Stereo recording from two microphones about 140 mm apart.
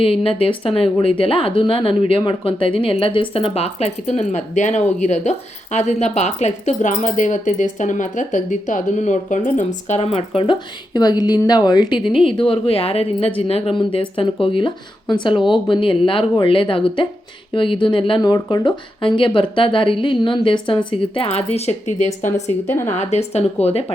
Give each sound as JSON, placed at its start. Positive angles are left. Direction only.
{"t": 0.0, "sound": "speech", "side_deg": 45}